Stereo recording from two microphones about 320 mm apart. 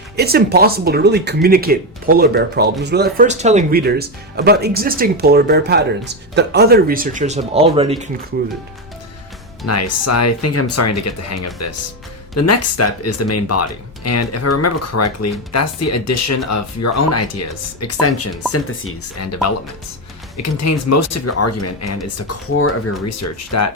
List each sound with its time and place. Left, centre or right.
0.2 s speech: right
9.6 s speech: left
20.3 s speech: left